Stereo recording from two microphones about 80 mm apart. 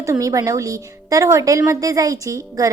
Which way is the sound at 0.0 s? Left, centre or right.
Right.